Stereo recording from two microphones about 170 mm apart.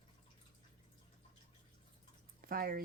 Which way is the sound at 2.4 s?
60° right (ahead or behind).